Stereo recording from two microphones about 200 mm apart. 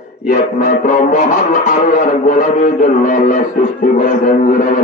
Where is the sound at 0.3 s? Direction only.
40° left (ahead or behind).